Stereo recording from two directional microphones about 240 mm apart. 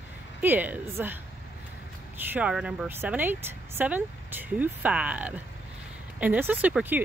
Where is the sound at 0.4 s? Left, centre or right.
Centre.